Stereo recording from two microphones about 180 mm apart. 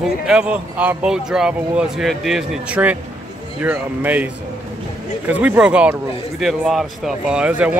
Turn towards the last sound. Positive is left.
turn(degrees=-5)  # may be behind; listen again after turning